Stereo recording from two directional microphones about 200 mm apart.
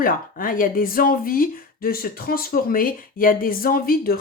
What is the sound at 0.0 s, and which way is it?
Speech, 45° left (ahead or behind).